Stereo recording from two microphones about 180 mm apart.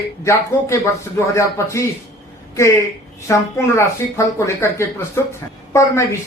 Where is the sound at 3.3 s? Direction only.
15° left (ahead or behind).